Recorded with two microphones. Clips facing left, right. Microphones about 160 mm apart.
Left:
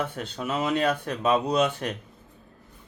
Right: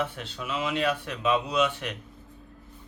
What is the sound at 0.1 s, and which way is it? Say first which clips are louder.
Speech: left 4 dB; 40° left (ahead or behind).